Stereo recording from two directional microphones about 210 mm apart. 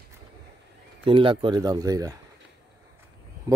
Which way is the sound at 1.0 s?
25° right (ahead or behind).